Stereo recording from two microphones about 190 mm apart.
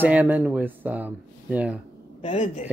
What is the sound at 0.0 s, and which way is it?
Speech, 10° right (ahead or behind).